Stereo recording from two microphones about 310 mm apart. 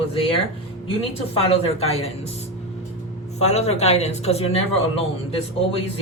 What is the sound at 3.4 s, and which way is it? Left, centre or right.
Speech, left.